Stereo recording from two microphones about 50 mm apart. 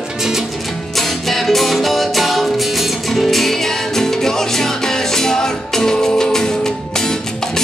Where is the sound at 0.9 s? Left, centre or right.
Centre.